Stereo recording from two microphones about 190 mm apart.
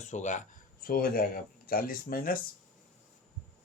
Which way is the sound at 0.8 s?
50° left (ahead or behind).